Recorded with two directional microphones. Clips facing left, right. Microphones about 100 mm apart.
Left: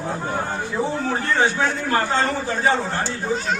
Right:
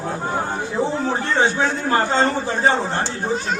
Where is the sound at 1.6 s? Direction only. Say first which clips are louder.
Right 2 dB; 25° right (ahead or behind).